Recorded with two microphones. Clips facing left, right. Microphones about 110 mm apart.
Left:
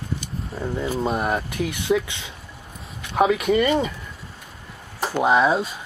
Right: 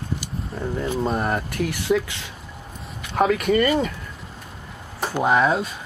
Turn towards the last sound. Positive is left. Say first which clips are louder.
# left 1 dB
turn(degrees=15)  # may be behind; listen again after turning